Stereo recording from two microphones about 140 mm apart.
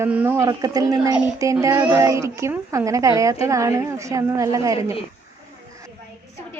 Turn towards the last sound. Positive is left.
turn(degrees=-25)  # may be behind; listen again after turning